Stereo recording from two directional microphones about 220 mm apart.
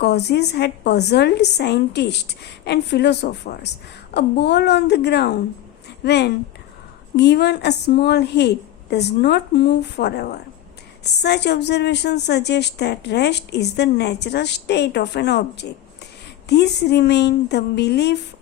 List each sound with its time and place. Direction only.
0.0 s a woman's voice: 50° left (ahead or behind)